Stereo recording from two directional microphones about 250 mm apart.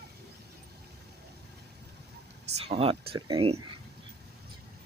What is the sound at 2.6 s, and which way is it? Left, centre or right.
Speech, right.